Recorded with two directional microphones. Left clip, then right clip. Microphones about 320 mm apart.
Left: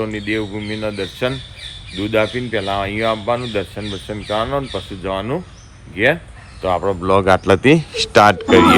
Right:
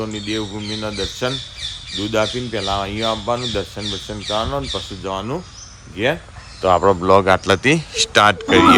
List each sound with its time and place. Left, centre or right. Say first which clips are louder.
0.0 s speech: left 3 dB; centre
6.6 s speech: right 4 dB; right
7.0 s speech: even; centre